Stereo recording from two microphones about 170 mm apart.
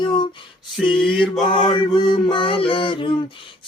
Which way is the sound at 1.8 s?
30° left (ahead or behind).